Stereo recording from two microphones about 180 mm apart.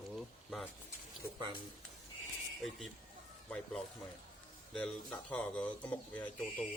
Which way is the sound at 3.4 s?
5° left (ahead or behind).